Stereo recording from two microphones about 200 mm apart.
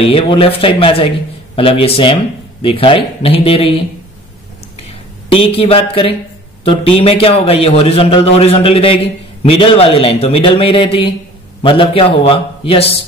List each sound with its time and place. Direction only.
0.0 s a man's voice: 25° left (ahead or behind)
5.3 s a man's voice: 25° left (ahead or behind)